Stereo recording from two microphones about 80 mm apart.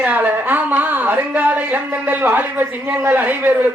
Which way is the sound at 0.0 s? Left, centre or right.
Right.